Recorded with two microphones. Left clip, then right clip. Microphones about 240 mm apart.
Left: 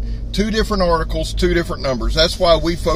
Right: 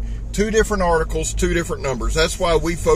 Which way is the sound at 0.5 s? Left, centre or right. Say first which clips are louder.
Even; centre.